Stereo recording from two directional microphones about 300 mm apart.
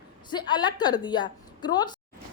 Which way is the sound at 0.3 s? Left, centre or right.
Centre.